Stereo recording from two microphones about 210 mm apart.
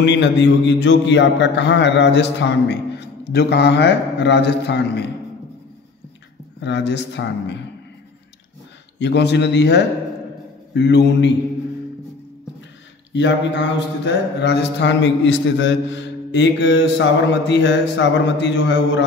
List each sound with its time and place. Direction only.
0.0 s speech: 55° left (ahead or behind)
6.6 s speech: 55° left (ahead or behind)
8.9 s speech: 55° left (ahead or behind)
13.1 s speech: 55° left (ahead or behind)